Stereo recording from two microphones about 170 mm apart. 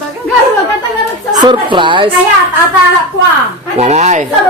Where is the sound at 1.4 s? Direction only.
25° right (ahead or behind).